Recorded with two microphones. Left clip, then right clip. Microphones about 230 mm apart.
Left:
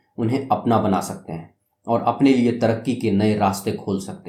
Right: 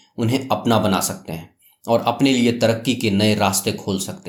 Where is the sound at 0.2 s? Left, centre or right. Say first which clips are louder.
Even; right.